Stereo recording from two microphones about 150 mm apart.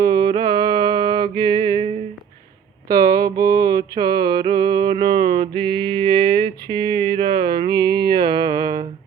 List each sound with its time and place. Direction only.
0.0 s music: 30° right (ahead or behind)
2.9 s mantra: 25° right (ahead or behind)
6.7 s a sound: 30° right (ahead or behind)